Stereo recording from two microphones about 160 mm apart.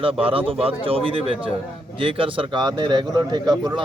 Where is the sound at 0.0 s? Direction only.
35° right (ahead or behind).